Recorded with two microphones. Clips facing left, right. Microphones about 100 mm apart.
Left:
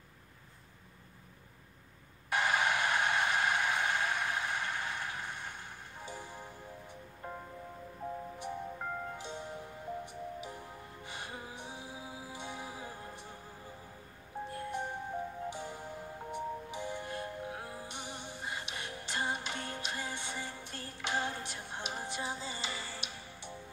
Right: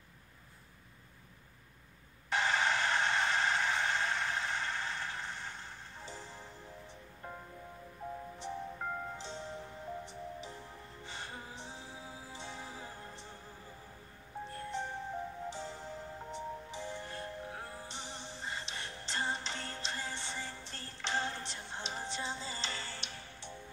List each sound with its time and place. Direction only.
2.2 s a sound: 10° left (ahead or behind)
8.4 s music: 10° left (ahead or behind)
14.5 s music: 10° left (ahead or behind)